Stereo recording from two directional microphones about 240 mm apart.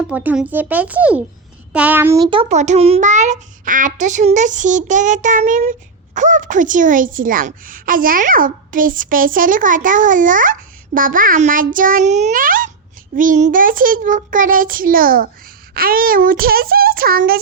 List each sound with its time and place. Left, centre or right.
0.1 s a woman's voice: centre; by 17.4 s right